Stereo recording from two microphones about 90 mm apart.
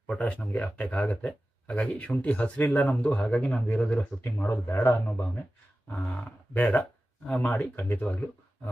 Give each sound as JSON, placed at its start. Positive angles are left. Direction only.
{"t": 0.1, "sound": "speech", "side_deg": 15}